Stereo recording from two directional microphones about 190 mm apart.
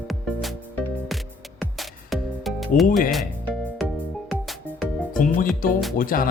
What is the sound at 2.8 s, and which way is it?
Speech, 45° left (ahead or behind).